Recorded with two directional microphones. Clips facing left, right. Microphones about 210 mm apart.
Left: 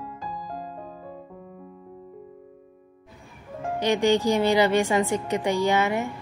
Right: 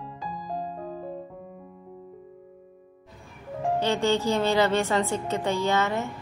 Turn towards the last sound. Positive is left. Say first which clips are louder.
# left 2 dB
turn(degrees=15)  # may be behind; listen again after turning